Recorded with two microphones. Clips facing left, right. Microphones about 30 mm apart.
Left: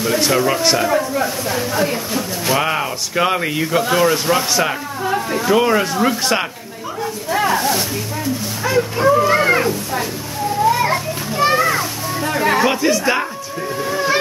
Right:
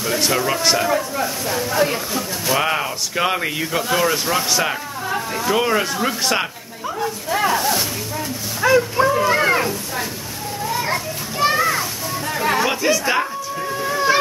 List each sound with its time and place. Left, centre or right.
0.0 s speech: centre
7.0 s snake: centre
8.7 s speech: centre
10.6 s children playing: centre
10.9 s children playing: centre
12.3 s music: centre
13.7 s vehicle: centre